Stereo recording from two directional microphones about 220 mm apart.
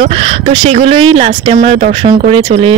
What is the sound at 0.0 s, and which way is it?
Speech, 25° right (ahead or behind).